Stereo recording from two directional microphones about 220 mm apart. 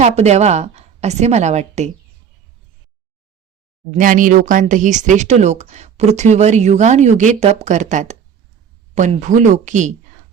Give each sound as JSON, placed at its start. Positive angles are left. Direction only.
{"t": 0.0, "sound": "speech", "side_deg": -30}
{"t": 3.9, "sound": "speech", "side_deg": -35}